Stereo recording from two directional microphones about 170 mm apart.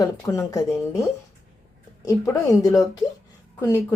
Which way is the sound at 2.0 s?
20° left (ahead or behind).